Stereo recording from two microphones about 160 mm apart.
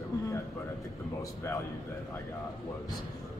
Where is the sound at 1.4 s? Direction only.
15° left (ahead or behind).